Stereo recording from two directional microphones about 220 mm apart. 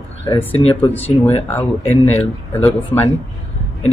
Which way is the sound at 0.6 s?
20° left (ahead or behind).